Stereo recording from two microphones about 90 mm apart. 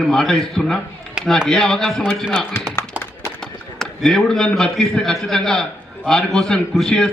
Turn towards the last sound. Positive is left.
turn(degrees=5)  # may be behind; listen again after turning